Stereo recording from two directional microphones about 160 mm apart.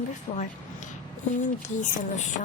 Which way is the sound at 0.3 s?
40° left (ahead or behind).